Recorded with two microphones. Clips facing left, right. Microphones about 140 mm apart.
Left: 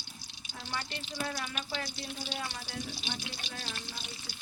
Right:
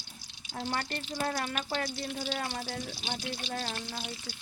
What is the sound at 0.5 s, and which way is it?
Speech, 45° right (ahead or behind).